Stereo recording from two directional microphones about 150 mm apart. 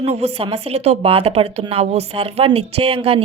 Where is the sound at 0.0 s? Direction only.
45° right (ahead or behind).